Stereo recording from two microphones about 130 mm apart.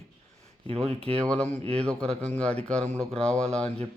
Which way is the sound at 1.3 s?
10° left (ahead or behind).